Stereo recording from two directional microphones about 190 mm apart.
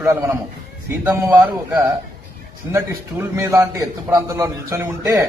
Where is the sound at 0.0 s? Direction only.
15° right (ahead or behind).